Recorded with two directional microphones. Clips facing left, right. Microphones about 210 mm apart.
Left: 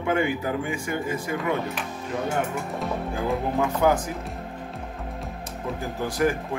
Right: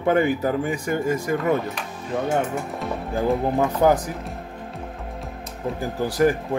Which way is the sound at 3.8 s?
40° right (ahead or behind).